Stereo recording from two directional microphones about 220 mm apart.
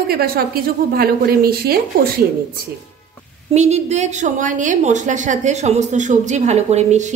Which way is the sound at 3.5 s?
30° right (ahead or behind).